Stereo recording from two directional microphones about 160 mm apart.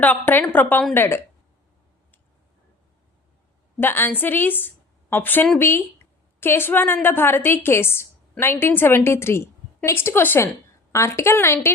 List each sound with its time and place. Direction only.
0.0 s a woman's voice: 10° left (ahead or behind)
3.8 s a woman's voice: 15° left (ahead or behind)